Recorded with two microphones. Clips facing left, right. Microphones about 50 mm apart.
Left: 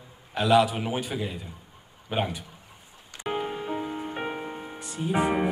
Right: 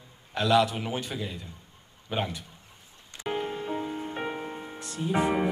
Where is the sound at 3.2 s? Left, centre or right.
Centre.